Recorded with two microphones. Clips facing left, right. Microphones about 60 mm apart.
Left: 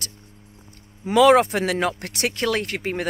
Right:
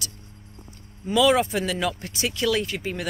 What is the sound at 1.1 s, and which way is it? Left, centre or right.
Speech, left.